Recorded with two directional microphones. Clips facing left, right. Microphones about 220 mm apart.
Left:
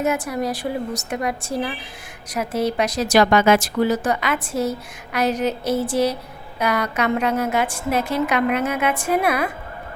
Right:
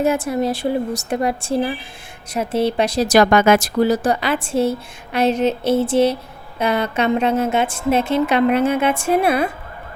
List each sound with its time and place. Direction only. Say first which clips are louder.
0.0 s speech: right 4 dB; 30° right (ahead or behind)